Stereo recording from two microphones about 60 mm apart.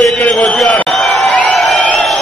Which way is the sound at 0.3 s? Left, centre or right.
Centre.